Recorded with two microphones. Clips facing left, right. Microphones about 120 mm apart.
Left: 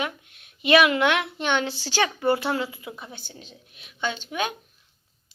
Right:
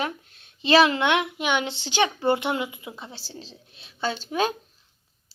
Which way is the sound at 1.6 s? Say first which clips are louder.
Right 1 dB; 20° right (ahead or behind).